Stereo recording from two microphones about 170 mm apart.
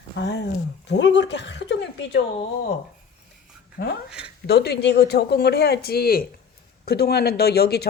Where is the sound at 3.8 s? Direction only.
80° left.